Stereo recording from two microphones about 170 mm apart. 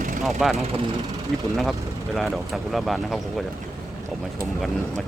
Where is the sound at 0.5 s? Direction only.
35° right (ahead or behind).